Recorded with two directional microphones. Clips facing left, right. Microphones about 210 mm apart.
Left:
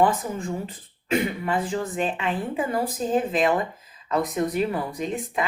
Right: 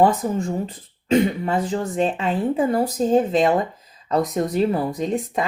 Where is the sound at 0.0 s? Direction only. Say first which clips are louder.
Right 4 dB; 40° right (ahead or behind).